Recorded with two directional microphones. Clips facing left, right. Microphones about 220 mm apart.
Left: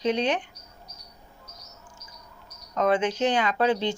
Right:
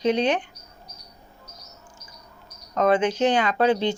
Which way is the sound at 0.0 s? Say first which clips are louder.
Right 3 dB; 85° right.